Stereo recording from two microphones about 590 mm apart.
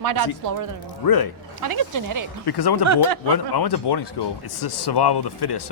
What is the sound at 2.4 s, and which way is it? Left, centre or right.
A man's voice, left.